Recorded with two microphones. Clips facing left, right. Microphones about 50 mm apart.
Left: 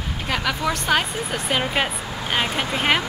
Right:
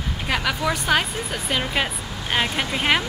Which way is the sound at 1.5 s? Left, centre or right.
Centre.